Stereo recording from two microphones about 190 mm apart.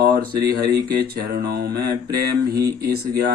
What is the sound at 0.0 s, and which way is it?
Speech, 55° right (ahead or behind).